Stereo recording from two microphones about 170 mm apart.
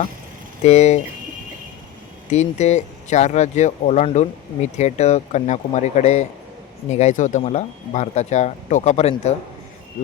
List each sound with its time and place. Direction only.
0.6 s speech: 40° left (ahead or behind)
2.3 s speech: 40° left (ahead or behind)